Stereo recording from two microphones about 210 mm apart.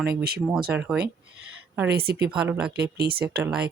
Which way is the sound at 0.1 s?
50° right (ahead or behind).